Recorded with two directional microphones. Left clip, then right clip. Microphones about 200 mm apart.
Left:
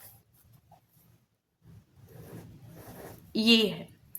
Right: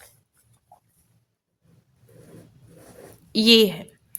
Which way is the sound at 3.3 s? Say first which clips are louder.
Right 8 dB; 45° right (ahead or behind).